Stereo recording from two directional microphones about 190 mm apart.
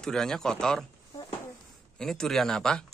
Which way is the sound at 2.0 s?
5° left (ahead or behind).